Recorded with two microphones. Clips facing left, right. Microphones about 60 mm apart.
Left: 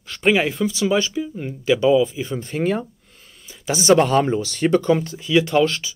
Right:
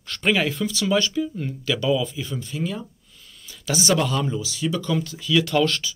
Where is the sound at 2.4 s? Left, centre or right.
Left.